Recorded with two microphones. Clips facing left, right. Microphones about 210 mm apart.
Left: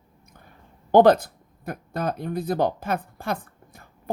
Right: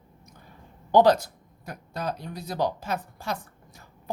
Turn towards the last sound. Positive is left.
turn(degrees=55)  # may be behind; listen again after turning